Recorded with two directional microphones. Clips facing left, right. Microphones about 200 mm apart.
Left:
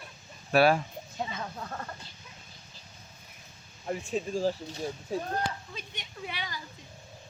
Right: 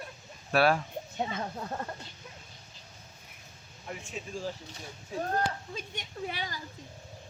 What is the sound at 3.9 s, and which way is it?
Speech, 35° left (ahead or behind).